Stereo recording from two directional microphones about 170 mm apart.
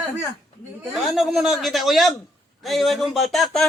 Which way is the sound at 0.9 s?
Centre (ahead or behind).